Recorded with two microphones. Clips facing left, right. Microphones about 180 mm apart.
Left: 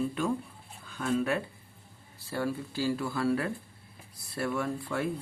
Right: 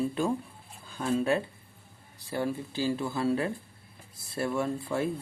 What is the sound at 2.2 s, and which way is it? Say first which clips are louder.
Speech: right 1 dB; 20° right (ahead or behind).